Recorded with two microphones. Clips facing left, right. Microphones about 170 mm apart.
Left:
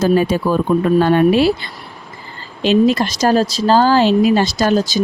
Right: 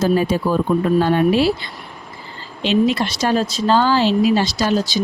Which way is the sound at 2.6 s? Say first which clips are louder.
Left 4 dB; 45° left (ahead or behind).